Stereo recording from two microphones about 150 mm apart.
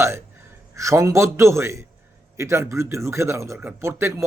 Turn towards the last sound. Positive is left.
turn(degrees=-15)  # may be behind; listen again after turning